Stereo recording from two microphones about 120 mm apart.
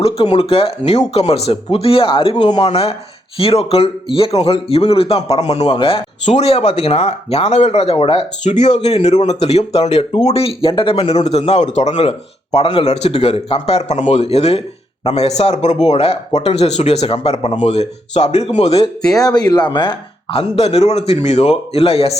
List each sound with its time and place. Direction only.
0.2 s speech: 50° left (ahead or behind); by 2.6 s 35° left (ahead or behind)
2.6 s speech: 55° left (ahead or behind)
5.7 s speech: 50° left (ahead or behind)
6.2 s speech: 60° left (ahead or behind)
12.8 s speech: 65° left (ahead or behind)
19.2 s speech: 35° left (ahead or behind); by 22.2 s 55° left (ahead or behind)